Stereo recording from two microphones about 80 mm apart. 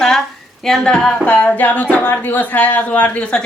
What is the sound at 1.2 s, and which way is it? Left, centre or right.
Speech, left.